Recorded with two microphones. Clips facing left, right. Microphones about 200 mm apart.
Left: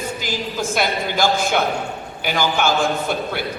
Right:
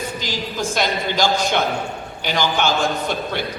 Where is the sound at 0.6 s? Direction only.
5° left (ahead or behind).